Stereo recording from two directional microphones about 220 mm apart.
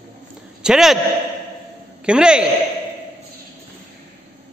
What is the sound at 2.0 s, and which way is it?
Speech, 5° right (ahead or behind).